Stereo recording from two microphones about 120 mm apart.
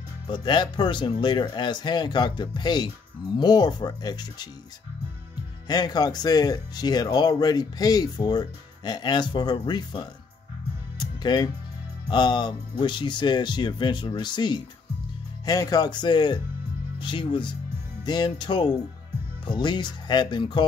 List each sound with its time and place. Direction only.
0.3 s speech: 40° left (ahead or behind)
5.7 s speech: 35° left (ahead or behind)
11.0 s music: 35° left (ahead or behind)
12.1 s speech: 40° left (ahead or behind)